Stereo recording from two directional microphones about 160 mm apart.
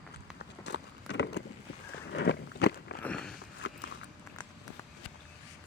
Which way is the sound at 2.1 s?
90° left.